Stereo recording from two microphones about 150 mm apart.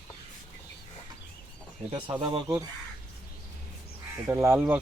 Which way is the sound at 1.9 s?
30° right (ahead or behind).